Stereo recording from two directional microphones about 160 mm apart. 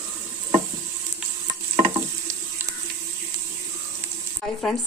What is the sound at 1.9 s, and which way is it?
Stir, 20° right (ahead or behind).